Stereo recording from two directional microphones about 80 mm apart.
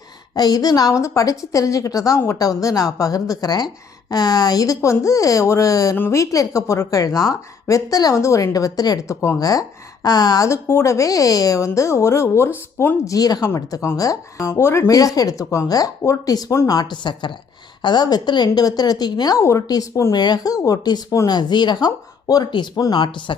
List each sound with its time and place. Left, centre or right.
0.3 s a woman's voice: left
10.5 s a woman's voice: left
13.1 s a woman's voice: left
13.5 s a woman's voice: left
14.8 s a woman's voice: left
16.9 s a woman's voice: left
17.8 s speech: left
19.4 s a woman's voice: left
21.2 s speech: left
22.8 s speech: left